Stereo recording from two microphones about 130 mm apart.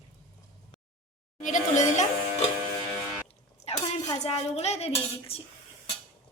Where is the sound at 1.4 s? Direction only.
75° left (ahead or behind).